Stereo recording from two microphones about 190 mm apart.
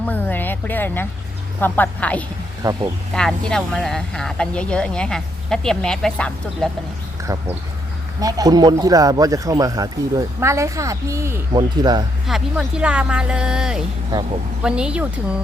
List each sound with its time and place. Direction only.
0.0 s music: 10° left (ahead or behind)
1.6 s a woman's voice: 10° left (ahead or behind)
2.6 s speech: 20° right (ahead or behind)
3.1 s speech: centre (ahead or behind)
8.2 s speech: 20° right (ahead or behind)
12.3 s speech: 5° right (ahead or behind)